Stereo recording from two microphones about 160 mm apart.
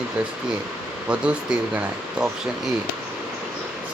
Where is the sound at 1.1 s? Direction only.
5° right (ahead or behind).